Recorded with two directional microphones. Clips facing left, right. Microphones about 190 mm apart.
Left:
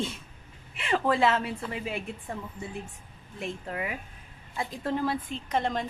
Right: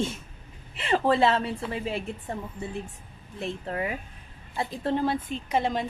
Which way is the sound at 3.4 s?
35° right (ahead or behind).